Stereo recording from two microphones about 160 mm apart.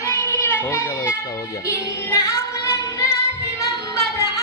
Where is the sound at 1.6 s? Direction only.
20° left (ahead or behind).